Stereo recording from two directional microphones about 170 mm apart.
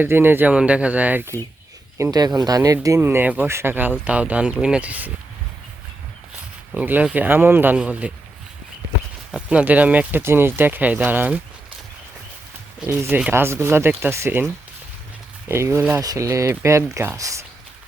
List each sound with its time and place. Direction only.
0.0 s speech: 15° right (ahead or behind)
2.0 s speech: 25° right (ahead or behind)
6.7 s speech: 10° right (ahead or behind)
9.3 s speech: 5° right (ahead or behind)
12.8 s speech: 10° right (ahead or behind)